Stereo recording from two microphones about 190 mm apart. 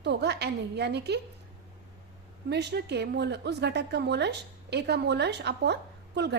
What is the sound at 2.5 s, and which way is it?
A woman's voice, 60° right (ahead or behind).